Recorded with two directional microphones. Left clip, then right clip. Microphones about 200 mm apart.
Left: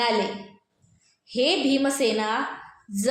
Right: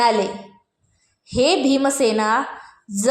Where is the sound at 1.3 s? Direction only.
20° right (ahead or behind).